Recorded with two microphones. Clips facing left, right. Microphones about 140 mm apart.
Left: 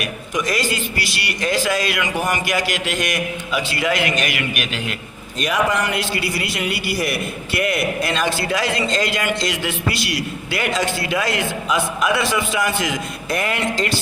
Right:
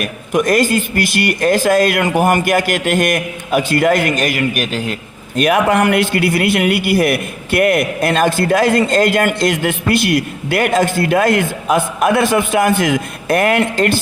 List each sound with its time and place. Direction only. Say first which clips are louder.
0.0 s a man's voice: right 7 dB; 50° right (ahead or behind)
5.4 s a man's voice: right 7 dB; 60° right (ahead or behind)